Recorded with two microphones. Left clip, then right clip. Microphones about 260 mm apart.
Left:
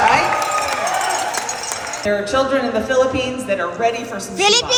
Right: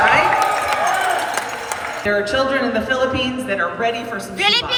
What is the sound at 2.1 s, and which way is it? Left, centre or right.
A man's voice, left.